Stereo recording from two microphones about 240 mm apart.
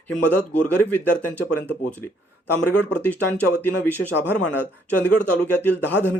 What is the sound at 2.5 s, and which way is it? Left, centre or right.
Speech, left.